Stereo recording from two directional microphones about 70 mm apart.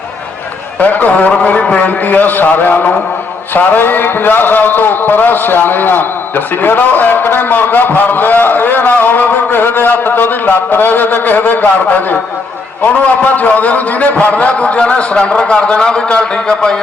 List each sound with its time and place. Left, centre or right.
0.8 s a man's voice: left
13.3 s speech: left